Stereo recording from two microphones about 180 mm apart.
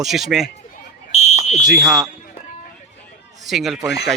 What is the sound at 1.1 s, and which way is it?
Smoke detector, 40° left (ahead or behind).